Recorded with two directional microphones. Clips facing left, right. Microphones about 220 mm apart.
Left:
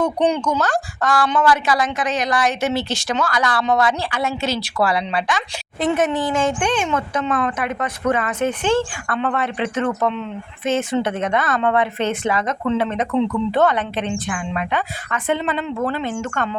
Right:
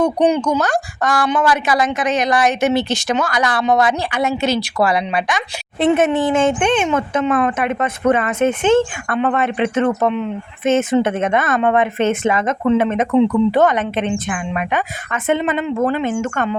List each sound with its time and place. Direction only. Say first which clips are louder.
0.3 s a woman's voice: right 3 dB; 10° right (ahead or behind)